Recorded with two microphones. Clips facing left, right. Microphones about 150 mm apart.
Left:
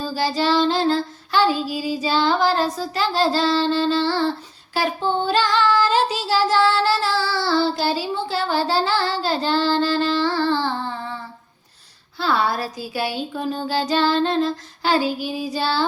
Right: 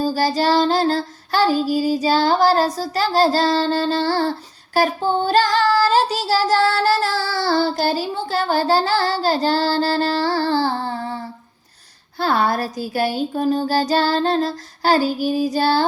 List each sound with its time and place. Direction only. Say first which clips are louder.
0.0 s child singing: right 3 dB; 40° right (ahead or behind)
4.7 s female singing: right 4 dB; 45° right (ahead or behind)
12.2 s child singing: right 2 dB; 45° right (ahead or behind)